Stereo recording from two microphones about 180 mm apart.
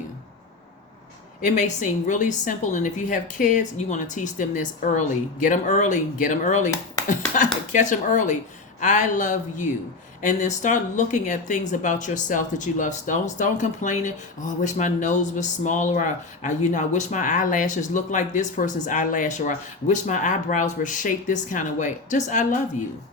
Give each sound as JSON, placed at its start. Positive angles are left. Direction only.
{"t": 1.4, "sound": "speech", "side_deg": 40}